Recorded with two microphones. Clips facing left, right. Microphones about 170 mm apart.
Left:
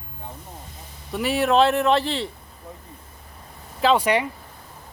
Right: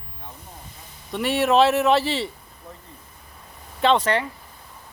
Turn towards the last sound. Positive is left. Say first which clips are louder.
# left 1 dB
turn(degrees=10)  # may be behind; listen again after turning